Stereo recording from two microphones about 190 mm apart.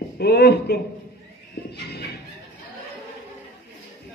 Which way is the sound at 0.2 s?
55° left (ahead or behind).